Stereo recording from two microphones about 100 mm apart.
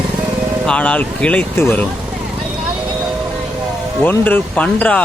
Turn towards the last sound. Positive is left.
turn(degrees=15)  # may be behind; listen again after turning